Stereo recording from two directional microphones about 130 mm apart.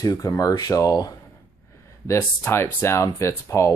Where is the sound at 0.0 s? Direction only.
25° left (ahead or behind).